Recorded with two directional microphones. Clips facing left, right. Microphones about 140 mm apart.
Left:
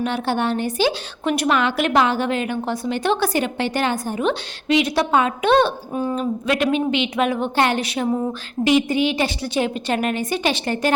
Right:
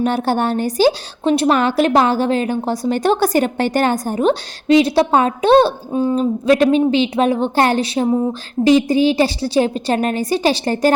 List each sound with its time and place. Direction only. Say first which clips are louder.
0.0 s a woman's voice: right 4 dB; 45° right (ahead or behind)